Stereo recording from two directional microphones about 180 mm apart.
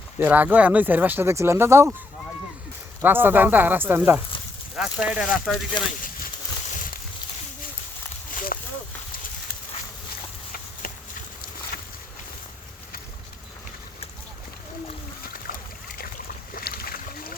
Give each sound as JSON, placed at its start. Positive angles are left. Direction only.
{"t": 0.2, "sound": "speech", "side_deg": -10}
{"t": 3.0, "sound": "speech", "side_deg": -10}
{"t": 5.8, "sound": "speech", "side_deg": 25}
{"t": 6.7, "sound": "a sound", "side_deg": 50}
{"t": 8.5, "sound": "a sound", "side_deg": 50}
{"t": 15.4, "sound": "boat", "side_deg": 50}